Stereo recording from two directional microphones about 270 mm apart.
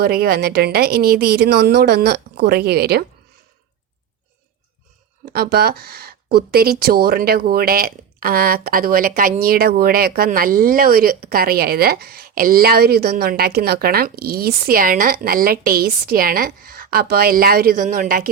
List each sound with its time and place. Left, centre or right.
0.0 s speech: right
5.2 s speech: right